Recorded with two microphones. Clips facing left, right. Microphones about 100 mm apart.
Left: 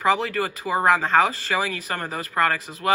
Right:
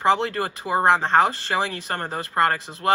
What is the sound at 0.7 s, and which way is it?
Speech, 15° right (ahead or behind).